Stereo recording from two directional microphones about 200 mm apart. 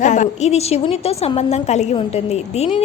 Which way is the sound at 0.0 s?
35° left (ahead or behind).